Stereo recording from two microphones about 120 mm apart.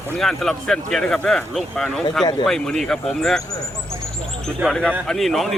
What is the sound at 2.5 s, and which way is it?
Speech, 5° left (ahead or behind).